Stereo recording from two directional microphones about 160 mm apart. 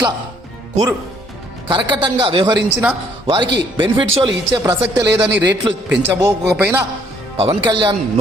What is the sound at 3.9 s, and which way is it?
Speech, 30° right (ahead or behind).